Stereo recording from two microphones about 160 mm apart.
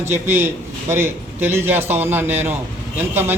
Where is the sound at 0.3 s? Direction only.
15° right (ahead or behind).